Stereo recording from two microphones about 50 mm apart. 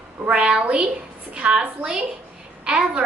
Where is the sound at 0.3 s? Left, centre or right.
Right.